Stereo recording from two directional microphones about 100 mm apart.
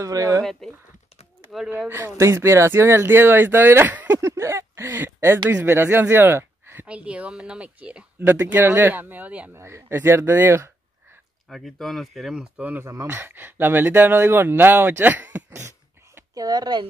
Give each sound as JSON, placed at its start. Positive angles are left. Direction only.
{"t": 0.0, "sound": "speech", "side_deg": -35}
{"t": 0.4, "sound": "speech", "side_deg": 5}
{"t": 1.9, "sound": "speech", "side_deg": -25}
{"t": 4.2, "sound": "speech", "side_deg": -30}
{"t": 9.6, "sound": "speech", "side_deg": -25}
{"t": 11.4, "sound": "speech", "side_deg": 0}
{"t": 12.8, "sound": "speech", "side_deg": -25}
{"t": 16.3, "sound": "speech", "side_deg": -40}